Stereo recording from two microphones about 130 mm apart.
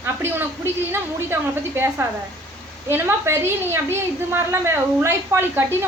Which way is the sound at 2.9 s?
15° right (ahead or behind).